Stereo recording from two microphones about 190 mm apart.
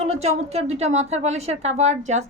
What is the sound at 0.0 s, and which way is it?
Speech, 35° right (ahead or behind).